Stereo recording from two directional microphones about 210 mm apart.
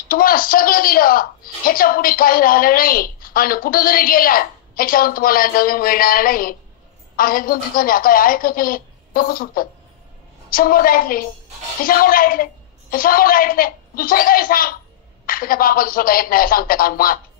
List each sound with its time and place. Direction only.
0.1 s a woman's voice: 45° left (ahead or behind)